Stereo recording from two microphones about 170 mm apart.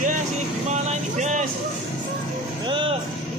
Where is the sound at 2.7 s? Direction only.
30° right (ahead or behind).